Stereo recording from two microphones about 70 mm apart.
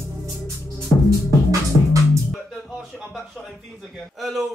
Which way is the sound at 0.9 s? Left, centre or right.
Left.